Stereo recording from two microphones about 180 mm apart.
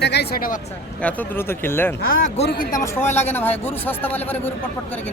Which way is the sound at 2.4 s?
55° left (ahead or behind).